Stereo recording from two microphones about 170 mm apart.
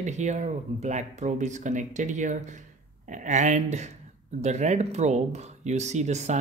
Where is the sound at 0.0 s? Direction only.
45° right (ahead or behind).